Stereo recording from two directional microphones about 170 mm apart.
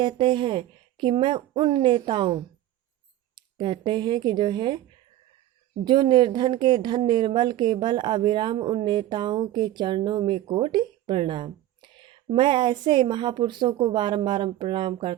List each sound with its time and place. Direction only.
0.0 s a woman's voice: 30° right (ahead or behind)
5.8 s a woman's voice: 25° right (ahead or behind)